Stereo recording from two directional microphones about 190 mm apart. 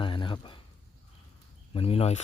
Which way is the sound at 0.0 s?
25° left (ahead or behind).